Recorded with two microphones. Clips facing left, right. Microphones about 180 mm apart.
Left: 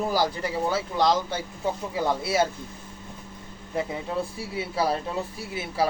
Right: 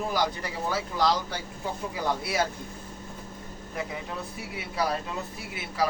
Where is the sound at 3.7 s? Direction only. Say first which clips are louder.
Left 6 dB; 30° left (ahead or behind).